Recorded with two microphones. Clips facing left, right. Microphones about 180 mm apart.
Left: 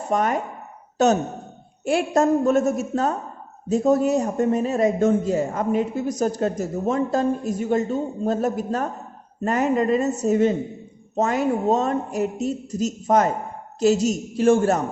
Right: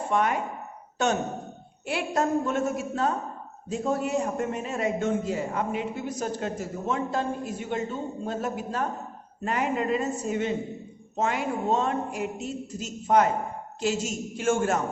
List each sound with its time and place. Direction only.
0.1 s a man's voice: 40° left (ahead or behind)
0.9 s a sound: 40° left (ahead or behind)
1.8 s a woman's voice: 45° left (ahead or behind)